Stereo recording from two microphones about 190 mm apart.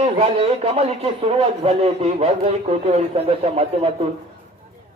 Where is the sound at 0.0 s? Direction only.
35° right (ahead or behind).